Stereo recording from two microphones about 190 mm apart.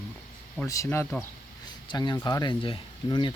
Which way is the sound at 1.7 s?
20° left (ahead or behind).